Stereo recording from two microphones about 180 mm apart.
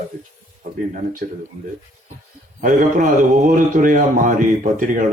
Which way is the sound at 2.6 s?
45° right (ahead or behind).